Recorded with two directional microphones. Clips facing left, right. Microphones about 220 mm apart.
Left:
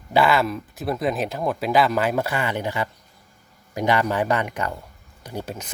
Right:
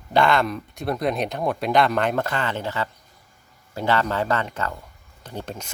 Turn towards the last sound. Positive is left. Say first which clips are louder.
# left 2 dB
turn(degrees=10)  # may be behind; listen again after turning